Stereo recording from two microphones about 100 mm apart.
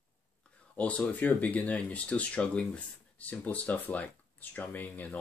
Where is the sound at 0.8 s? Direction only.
15° left (ahead or behind).